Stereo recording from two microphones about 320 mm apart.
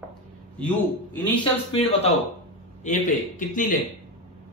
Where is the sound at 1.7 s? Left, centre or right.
Centre.